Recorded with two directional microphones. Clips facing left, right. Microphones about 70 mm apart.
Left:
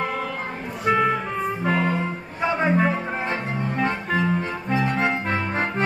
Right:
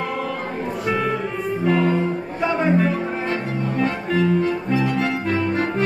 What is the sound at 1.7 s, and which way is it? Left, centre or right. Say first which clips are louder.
Music: right 5 dB; centre.